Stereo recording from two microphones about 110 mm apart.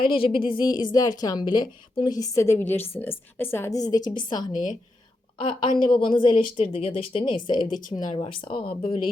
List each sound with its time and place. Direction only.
0.0 s a woman's voice: 55° left (ahead or behind); by 3.8 s 20° left (ahead or behind)
3.8 s a woman's voice: 35° left (ahead or behind)
8.1 s a woman's voice: 55° left (ahead or behind)